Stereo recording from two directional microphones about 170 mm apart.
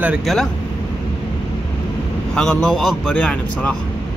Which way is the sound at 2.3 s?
5° left (ahead or behind).